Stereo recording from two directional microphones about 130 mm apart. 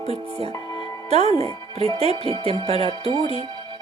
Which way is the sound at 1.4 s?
50° right (ahead or behind).